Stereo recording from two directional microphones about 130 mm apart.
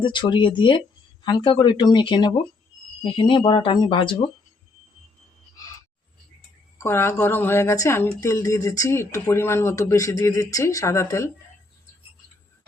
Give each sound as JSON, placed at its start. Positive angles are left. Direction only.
{"t": 0.0, "sound": "speech", "side_deg": 35}
{"t": 6.8, "sound": "speech", "side_deg": 20}